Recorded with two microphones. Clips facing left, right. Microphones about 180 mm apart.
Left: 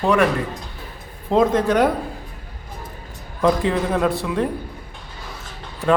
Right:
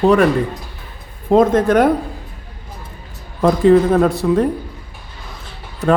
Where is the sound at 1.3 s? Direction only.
50° right (ahead or behind).